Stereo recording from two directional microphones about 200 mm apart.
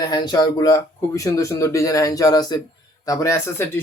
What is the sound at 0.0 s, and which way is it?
Speech, 20° left (ahead or behind).